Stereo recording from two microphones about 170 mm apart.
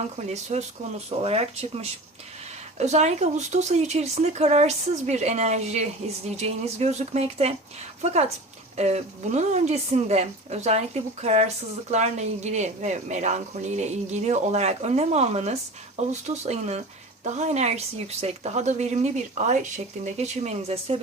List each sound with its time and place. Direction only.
0.2 s a woman's voice: 40° right (ahead or behind)